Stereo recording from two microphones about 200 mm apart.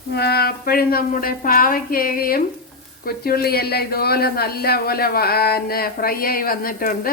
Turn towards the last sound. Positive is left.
turn(degrees=45)  # may be behind; listen again after turning